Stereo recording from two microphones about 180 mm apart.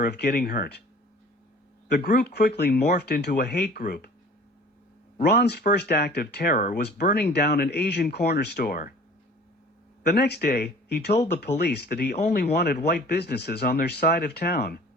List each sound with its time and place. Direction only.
0.0 s speech: 60° left (ahead or behind)
2.0 s speech: 55° left (ahead or behind)
5.3 s speech: 65° left (ahead or behind)
10.1 s speech: 65° left (ahead or behind)